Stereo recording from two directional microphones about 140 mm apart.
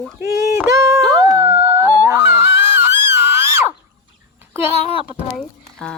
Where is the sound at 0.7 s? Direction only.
20° right (ahead or behind).